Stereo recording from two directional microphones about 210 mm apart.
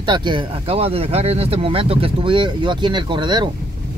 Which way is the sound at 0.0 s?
20° right (ahead or behind).